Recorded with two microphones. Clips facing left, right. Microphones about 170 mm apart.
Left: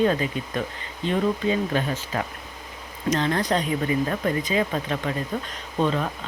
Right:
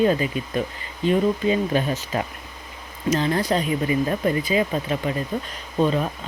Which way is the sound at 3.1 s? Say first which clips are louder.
Right 2 dB; 5° right (ahead or behind).